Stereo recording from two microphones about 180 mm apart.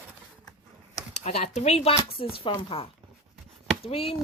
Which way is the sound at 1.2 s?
40° left (ahead or behind).